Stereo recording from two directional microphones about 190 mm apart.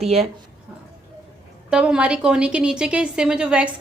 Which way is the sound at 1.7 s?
5° right (ahead or behind).